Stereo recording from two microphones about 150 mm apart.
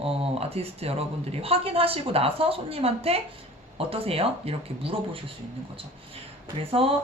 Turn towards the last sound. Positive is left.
turn(degrees=-40)  # may be behind; listen again after turning